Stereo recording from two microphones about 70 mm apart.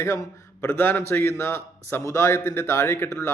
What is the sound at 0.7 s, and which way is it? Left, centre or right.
A man's voice, left.